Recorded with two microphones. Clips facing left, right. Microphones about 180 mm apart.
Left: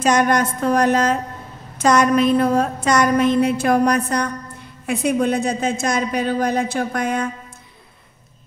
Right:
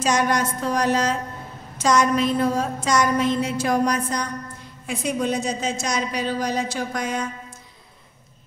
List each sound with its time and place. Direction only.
0.0 s a woman's voice: 55° left (ahead or behind)